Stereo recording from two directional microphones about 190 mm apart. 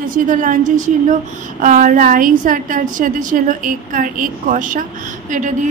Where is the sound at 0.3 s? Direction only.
45° right (ahead or behind).